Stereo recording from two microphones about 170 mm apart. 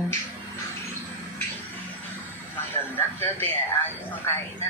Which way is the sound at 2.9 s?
10° left (ahead or behind).